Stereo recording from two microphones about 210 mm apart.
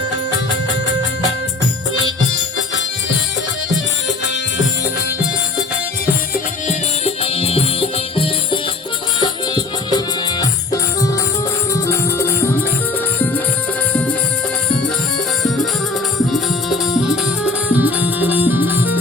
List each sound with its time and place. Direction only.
2.0 s music: 60° left (ahead or behind)
6.3 s music: 30° left (ahead or behind); by 12.6 s 10° left (ahead or behind)
16.3 s music: centre (ahead or behind)